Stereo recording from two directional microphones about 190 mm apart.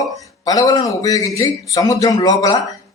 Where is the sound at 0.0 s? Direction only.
20° left (ahead or behind).